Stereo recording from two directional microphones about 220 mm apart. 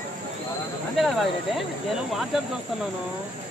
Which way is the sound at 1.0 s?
Centre (ahead or behind).